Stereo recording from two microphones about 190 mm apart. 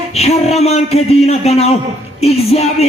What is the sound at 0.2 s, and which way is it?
A man's voice, 35° left (ahead or behind).